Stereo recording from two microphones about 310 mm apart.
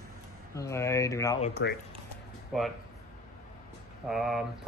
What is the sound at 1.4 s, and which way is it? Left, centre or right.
Speech, left.